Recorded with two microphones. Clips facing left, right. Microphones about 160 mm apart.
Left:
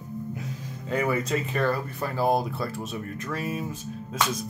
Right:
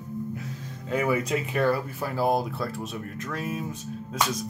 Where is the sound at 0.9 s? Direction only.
5° right (ahead or behind).